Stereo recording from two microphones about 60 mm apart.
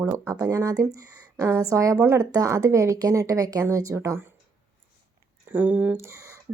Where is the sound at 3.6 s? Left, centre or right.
Right.